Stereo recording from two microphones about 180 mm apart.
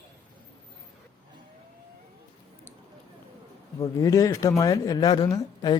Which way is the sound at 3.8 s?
20° left (ahead or behind).